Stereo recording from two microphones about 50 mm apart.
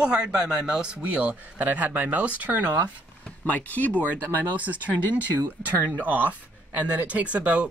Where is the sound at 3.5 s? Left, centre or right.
Left.